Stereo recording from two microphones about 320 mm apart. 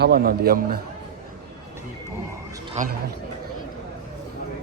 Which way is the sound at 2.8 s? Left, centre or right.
Right.